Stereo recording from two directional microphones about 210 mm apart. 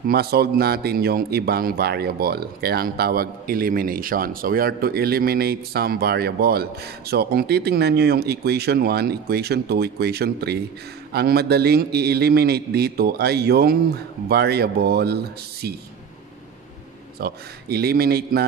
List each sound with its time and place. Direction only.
0.0 s speech: 50° right (ahead or behind)
17.2 s speech: 50° right (ahead or behind)